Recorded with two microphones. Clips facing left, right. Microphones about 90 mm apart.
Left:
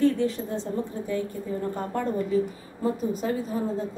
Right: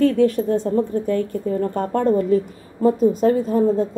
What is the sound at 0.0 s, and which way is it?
A woman's voice, 60° right (ahead or behind).